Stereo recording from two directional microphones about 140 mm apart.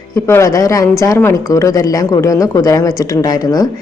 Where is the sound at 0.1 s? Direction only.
20° left (ahead or behind).